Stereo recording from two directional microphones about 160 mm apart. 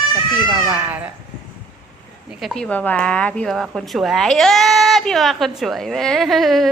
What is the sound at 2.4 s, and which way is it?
Speech, 5° left (ahead or behind).